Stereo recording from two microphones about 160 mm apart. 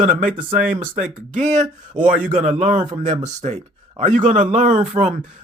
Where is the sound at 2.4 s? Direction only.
50° right (ahead or behind).